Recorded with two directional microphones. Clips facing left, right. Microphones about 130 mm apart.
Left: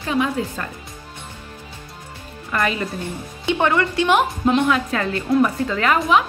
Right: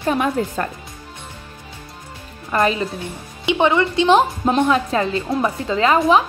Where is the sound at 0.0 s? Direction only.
45° right (ahead or behind).